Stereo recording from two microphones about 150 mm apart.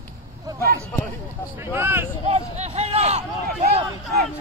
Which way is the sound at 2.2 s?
45° right (ahead or behind).